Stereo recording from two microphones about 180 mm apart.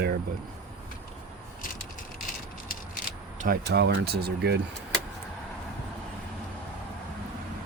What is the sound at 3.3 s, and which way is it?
Speech, 55° right (ahead or behind).